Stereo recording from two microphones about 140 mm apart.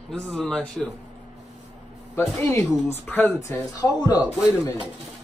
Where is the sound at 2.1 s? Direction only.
15° left (ahead or behind).